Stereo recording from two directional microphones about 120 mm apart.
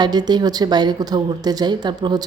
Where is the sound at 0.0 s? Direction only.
35° right (ahead or behind).